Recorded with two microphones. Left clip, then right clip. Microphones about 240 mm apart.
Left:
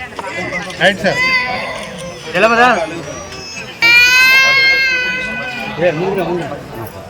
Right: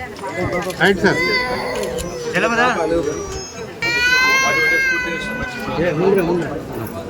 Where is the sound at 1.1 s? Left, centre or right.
Right.